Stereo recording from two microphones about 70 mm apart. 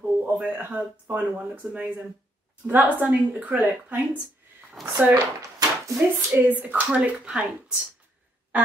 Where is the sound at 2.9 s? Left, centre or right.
Right.